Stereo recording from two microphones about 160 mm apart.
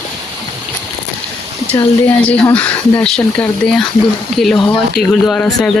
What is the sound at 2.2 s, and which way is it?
Speech, 10° left (ahead or behind).